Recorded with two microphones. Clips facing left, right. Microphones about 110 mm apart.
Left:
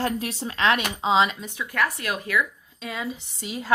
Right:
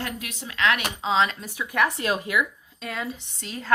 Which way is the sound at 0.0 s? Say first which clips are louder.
Left 7 dB; 35° left (ahead or behind).